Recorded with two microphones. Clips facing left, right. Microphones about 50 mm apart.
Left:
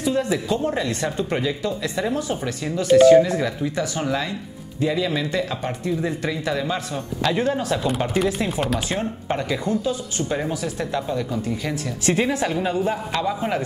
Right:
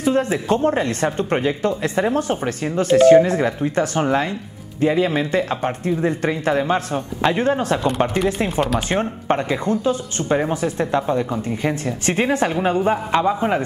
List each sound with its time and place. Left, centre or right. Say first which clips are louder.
0.0 s speech: right 3 dB; right
8.1 s speech: right 2 dB; centre
8.7 s speech: right 4 dB; right
13.2 s a man's voice: right 5 dB; right